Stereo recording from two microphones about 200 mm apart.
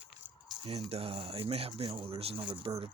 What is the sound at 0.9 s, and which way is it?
Speech, 30° right (ahead or behind).